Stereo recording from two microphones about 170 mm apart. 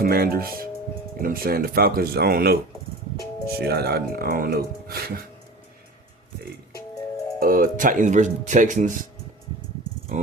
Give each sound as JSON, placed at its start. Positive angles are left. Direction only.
{"t": 0.0, "sound": "speech", "side_deg": -60}
{"t": 3.6, "sound": "speech", "side_deg": -70}
{"t": 7.3, "sound": "speech", "side_deg": -55}
{"t": 10.1, "sound": "insect", "side_deg": -45}